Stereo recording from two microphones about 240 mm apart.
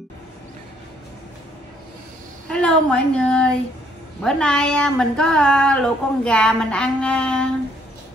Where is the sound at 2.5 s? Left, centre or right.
Centre.